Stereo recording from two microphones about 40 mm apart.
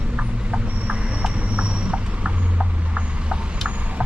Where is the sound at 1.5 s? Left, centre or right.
Right.